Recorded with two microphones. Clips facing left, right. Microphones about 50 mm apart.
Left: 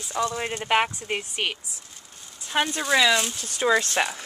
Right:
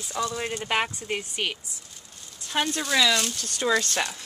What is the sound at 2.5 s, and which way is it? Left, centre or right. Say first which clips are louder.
Speech: left 2 dB; centre.